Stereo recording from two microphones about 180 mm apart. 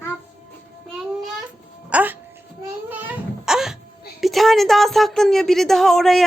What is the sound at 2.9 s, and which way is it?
Crying, 10° right (ahead or behind).